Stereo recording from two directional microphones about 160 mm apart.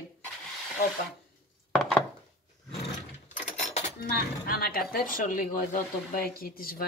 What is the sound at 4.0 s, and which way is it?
Speech, 75° left (ahead or behind).